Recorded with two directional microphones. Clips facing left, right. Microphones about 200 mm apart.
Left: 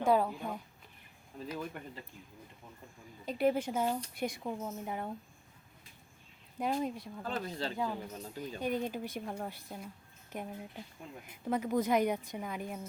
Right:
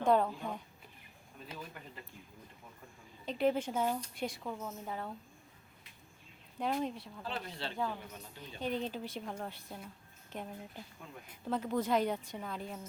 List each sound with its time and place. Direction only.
0.0 s speech: 5° left (ahead or behind)
3.2 s speech: 10° left (ahead or behind)
6.6 s speech: 10° left (ahead or behind)
7.2 s speech: 45° left (ahead or behind)
8.6 s speech: 10° left (ahead or behind)